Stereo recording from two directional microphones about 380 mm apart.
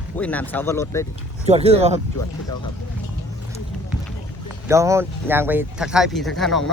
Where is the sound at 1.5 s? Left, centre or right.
Centre.